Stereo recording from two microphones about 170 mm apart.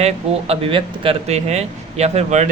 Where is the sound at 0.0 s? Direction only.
35° right (ahead or behind).